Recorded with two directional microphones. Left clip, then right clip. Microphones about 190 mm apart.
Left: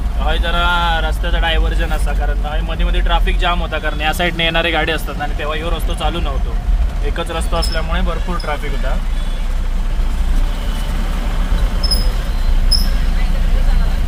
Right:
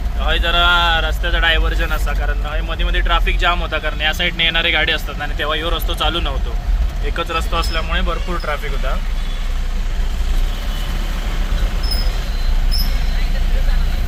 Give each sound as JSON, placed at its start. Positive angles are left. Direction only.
{"t": 0.3, "sound": "speech", "side_deg": 15}
{"t": 4.0, "sound": "speech", "side_deg": 45}
{"t": 5.2, "sound": "speech", "side_deg": 10}